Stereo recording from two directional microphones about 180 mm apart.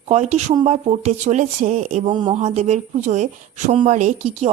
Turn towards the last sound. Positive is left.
turn(degrees=-40)  # may be behind; listen again after turning